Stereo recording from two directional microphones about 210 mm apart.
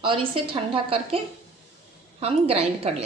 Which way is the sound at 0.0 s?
25° right (ahead or behind).